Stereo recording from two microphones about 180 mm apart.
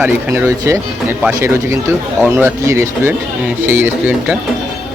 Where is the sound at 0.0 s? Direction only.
10° right (ahead or behind).